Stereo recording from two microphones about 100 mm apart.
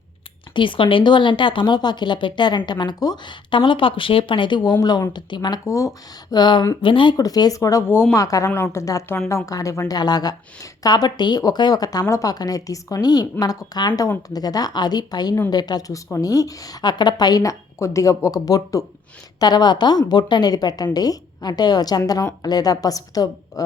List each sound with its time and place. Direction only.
0.5 s speech: 55° left (ahead or behind)
3.5 s speech: 55° left (ahead or behind)
5.6 s a woman's voice: 30° left (ahead or behind)
6.3 s a woman's voice: 45° left (ahead or behind)